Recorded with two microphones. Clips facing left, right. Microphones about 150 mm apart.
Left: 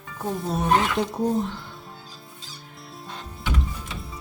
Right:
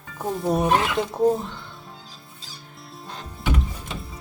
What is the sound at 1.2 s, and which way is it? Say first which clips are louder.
Speech: right 7 dB; centre (ahead or behind).